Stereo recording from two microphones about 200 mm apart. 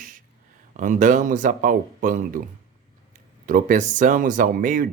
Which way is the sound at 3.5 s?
45° right (ahead or behind).